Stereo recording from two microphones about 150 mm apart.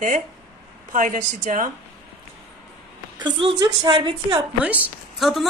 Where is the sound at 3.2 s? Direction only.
30° right (ahead or behind).